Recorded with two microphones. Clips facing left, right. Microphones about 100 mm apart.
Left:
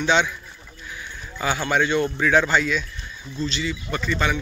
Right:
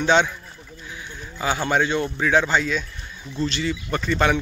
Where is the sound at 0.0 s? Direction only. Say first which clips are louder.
Right 2 dB; 45° right (ahead or behind).